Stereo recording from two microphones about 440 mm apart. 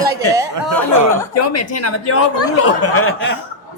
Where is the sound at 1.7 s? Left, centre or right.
Left.